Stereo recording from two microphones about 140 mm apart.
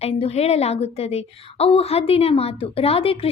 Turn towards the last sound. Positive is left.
turn(degrees=40)  # may be behind; listen again after turning